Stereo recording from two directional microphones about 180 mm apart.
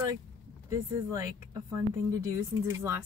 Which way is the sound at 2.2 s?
15° right (ahead or behind).